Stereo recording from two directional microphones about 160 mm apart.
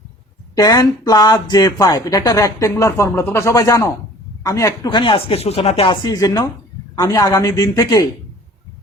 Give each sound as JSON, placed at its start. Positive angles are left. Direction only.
{"t": 0.5, "sound": "speech", "side_deg": 25}